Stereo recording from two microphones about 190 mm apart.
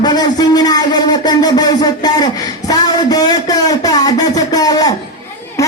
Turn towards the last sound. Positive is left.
turn(degrees=15)  # may be behind; listen again after turning